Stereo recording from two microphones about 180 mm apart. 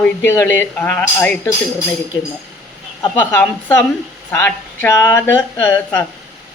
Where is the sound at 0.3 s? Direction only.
15° left (ahead or behind).